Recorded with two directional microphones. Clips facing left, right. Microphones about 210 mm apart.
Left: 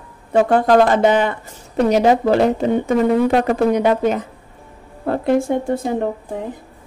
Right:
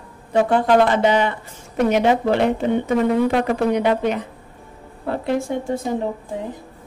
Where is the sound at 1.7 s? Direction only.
35° left (ahead or behind); by 5.8 s 50° left (ahead or behind).